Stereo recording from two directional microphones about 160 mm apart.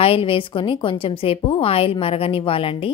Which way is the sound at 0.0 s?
35° left (ahead or behind).